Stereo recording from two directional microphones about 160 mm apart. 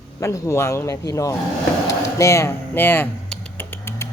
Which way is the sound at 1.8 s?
20° left (ahead or behind).